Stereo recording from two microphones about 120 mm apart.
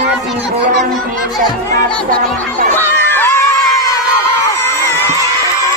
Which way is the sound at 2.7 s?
20° left (ahead or behind).